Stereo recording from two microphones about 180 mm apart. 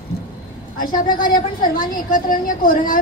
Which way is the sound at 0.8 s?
50° left (ahead or behind).